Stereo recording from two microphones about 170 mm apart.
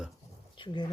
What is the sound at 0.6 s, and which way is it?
Speech, 25° left (ahead or behind).